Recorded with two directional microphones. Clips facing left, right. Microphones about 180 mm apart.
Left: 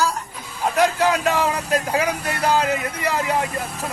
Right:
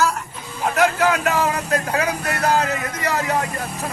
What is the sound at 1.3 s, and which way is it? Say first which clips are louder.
Speech: even; 10° left (ahead or behind).